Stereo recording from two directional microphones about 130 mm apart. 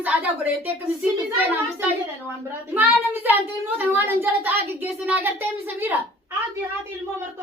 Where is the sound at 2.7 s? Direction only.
15° right (ahead or behind).